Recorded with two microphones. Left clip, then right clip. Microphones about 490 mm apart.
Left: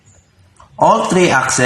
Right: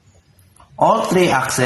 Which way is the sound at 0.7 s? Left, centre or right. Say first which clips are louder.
Left 3 dB; right.